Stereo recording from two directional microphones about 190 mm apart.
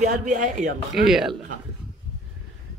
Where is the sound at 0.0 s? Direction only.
40° right (ahead or behind).